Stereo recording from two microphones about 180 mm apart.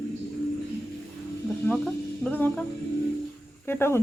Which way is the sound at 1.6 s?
5° left (ahead or behind).